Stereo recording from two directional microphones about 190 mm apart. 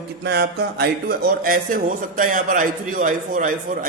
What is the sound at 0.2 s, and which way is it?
Speech, 60° right (ahead or behind).